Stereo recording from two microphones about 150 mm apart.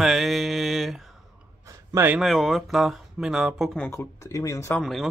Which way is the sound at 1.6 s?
20° right (ahead or behind).